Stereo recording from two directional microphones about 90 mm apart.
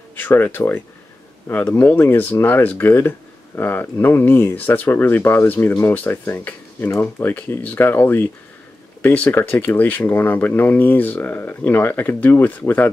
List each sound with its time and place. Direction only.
0.1 s speech: 20° left (ahead or behind)